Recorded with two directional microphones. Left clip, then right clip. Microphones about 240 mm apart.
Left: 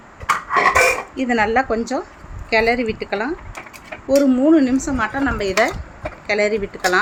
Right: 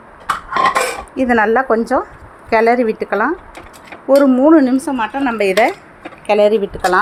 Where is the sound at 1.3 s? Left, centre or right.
Centre.